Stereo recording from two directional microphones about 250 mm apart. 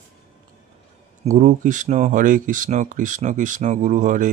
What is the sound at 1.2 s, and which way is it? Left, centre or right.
Speech, right.